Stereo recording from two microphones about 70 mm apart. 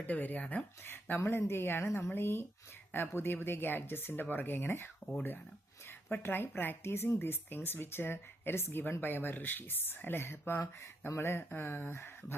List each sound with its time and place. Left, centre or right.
0.0 s speech: left
0.9 s speech: left
6.1 s speech: left